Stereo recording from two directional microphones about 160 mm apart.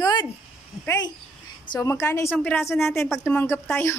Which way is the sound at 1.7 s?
20° left (ahead or behind).